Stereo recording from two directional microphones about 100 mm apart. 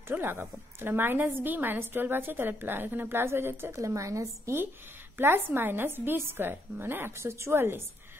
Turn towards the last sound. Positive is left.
turn(degrees=-25)  # may be behind; listen again after turning